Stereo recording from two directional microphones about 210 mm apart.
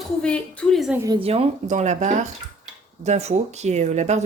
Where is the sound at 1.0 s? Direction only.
20° right (ahead or behind).